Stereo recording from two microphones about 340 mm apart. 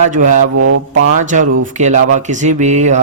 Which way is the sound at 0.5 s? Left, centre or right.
Right.